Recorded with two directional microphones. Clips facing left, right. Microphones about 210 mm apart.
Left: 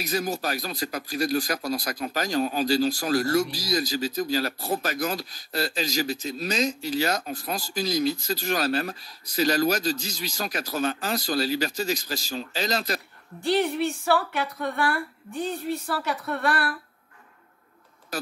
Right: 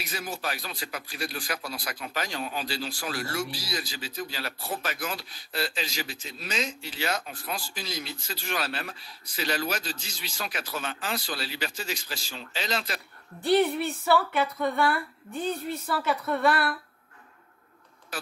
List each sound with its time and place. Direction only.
0.0 s speech: 40° left (ahead or behind)
13.4 s speech: centre (ahead or behind)
18.1 s speech: 40° left (ahead or behind)